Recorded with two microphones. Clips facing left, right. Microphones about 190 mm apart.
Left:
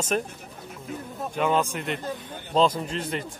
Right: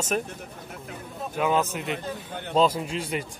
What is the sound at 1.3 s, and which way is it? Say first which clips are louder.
A man's voice: even; 5° right (ahead or behind).